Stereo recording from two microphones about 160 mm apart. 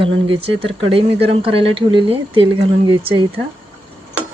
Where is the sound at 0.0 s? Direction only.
35° right (ahead or behind).